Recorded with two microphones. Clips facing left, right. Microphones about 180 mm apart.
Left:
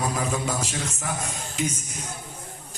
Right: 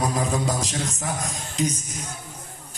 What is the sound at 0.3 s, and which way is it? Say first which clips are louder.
Speech: right 2 dB; 35° right (ahead or behind).